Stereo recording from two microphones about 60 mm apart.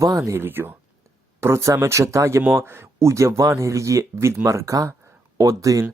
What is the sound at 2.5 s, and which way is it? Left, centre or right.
Speech, right.